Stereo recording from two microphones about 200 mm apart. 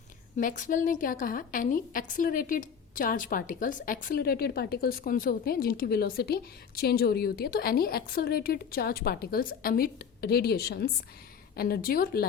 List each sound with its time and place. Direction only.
0.3 s a woman's voice: 40° left (ahead or behind)